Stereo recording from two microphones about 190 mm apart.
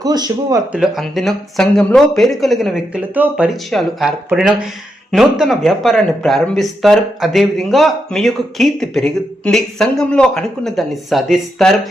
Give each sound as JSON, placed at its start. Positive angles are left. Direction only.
{"t": 0.0, "sound": "speech", "side_deg": -20}
{"t": 0.7, "sound": "speech", "side_deg": 0}